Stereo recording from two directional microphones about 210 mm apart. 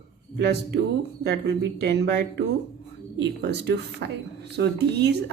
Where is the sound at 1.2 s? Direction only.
50° right (ahead or behind).